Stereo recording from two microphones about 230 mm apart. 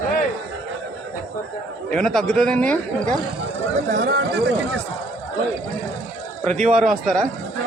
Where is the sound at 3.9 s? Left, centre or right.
Right.